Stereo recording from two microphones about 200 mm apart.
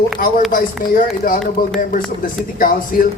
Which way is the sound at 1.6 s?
45° left (ahead or behind).